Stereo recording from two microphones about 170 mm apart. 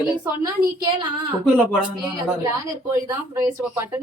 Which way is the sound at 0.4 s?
25° right (ahead or behind).